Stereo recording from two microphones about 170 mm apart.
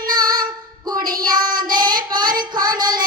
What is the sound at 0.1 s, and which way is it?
Female singing, 25° right (ahead or behind).